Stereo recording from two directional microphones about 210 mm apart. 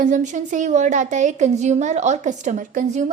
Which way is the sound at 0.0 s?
35° right (ahead or behind).